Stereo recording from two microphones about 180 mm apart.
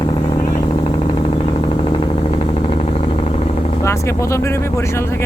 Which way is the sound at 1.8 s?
30° left (ahead or behind).